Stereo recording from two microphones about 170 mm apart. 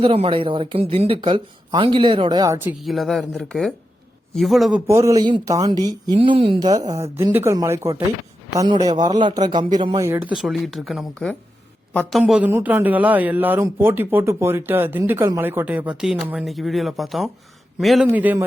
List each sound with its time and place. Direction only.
0.0 s speech: 35° right (ahead or behind)
2.6 s speech: centre (ahead or behind)
4.9 s speech: 15° right (ahead or behind); by 11.0 s centre (ahead or behind)
12.2 s speech: 10° right (ahead or behind)